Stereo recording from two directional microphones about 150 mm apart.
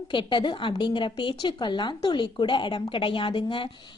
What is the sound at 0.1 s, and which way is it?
A woman's voice, 30° left (ahead or behind).